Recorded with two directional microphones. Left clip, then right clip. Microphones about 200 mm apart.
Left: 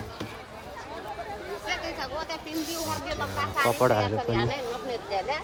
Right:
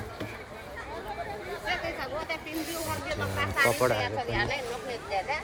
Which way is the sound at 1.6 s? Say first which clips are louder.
Even; 25° left (ahead or behind).